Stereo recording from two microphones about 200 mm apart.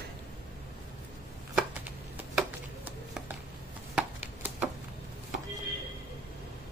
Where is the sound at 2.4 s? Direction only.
5° right (ahead or behind).